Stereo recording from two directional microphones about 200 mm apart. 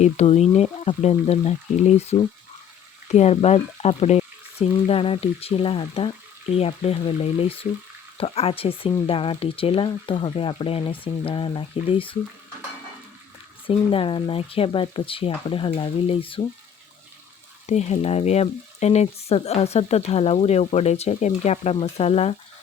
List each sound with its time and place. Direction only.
0.0 s speech: 35° left (ahead or behind)
13.7 s speech: 25° left (ahead or behind)
17.7 s speech: 35° left (ahead or behind)